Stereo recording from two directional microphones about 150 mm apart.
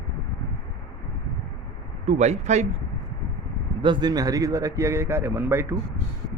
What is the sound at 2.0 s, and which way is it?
Speech, 50° right (ahead or behind).